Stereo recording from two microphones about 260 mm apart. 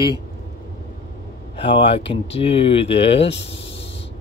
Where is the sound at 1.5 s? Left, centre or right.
Left.